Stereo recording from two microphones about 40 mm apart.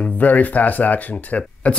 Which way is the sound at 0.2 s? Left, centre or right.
Left.